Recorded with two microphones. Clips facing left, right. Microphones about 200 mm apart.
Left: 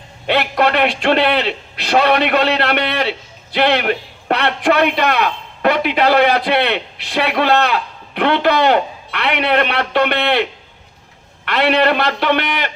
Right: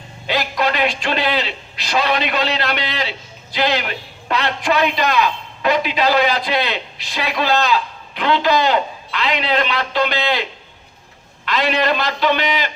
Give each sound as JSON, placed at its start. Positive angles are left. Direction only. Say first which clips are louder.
{"t": 0.3, "sound": "a man's voice", "louder": "left 4 dB", "side_deg": 65}